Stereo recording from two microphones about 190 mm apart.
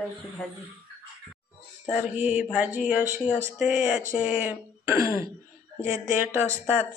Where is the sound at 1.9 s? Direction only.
5° right (ahead or behind).